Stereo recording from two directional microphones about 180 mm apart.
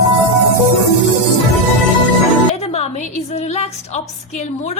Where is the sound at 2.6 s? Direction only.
35° left (ahead or behind).